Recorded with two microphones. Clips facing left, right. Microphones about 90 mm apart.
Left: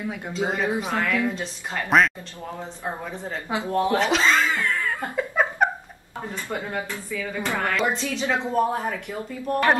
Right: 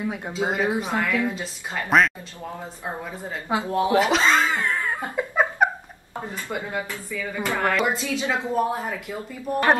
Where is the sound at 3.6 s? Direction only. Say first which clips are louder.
Right 1 dB; 10° right (ahead or behind).